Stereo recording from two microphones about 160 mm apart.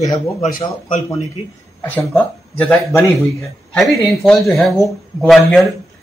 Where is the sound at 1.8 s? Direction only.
10° left (ahead or behind).